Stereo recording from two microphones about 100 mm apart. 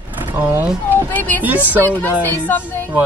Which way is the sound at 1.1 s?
20° left (ahead or behind).